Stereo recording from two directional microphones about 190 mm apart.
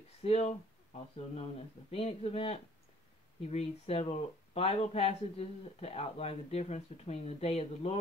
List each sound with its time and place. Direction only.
0.2 s speech: 35° left (ahead or behind)